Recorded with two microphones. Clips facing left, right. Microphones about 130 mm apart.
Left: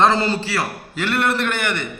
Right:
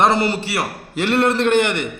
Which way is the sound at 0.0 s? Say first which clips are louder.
Even; 15° right (ahead or behind).